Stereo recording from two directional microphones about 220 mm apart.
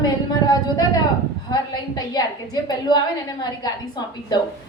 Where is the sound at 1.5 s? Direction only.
20° left (ahead or behind).